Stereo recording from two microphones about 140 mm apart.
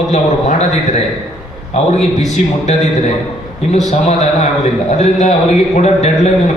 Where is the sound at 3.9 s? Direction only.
55° left (ahead or behind).